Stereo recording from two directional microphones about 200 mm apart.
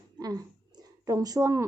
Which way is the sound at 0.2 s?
20° right (ahead or behind).